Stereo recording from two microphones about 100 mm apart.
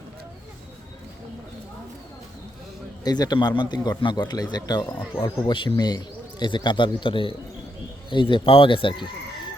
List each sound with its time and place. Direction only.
3.0 s a man's voice: 40° left (ahead or behind)
5.5 s a man's voice: 50° left (ahead or behind)